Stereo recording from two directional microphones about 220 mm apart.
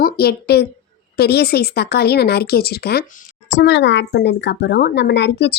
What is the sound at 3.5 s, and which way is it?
A woman's voice, 55° left (ahead or behind).